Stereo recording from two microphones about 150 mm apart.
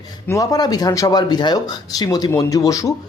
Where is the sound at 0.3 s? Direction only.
25° left (ahead or behind).